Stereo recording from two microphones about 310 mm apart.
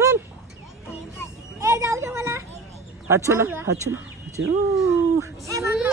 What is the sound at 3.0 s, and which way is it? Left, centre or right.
Speech, centre.